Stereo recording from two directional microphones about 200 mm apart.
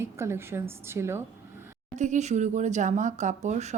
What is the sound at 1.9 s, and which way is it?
Speech, 35° right (ahead or behind).